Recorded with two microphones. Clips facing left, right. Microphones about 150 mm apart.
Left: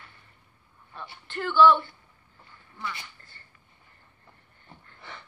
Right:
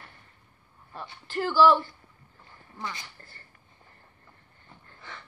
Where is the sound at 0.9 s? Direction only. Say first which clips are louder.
Right 4 dB; 30° right (ahead or behind).